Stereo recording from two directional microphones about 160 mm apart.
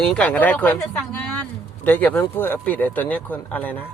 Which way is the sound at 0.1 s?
10° left (ahead or behind).